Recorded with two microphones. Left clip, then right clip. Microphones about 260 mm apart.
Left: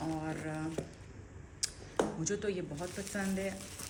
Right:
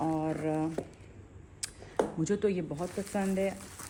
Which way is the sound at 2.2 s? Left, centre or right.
Right.